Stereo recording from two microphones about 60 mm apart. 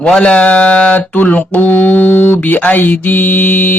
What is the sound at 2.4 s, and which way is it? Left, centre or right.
Speech, left.